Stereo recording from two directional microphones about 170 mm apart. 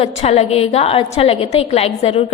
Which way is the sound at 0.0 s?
40° left (ahead or behind).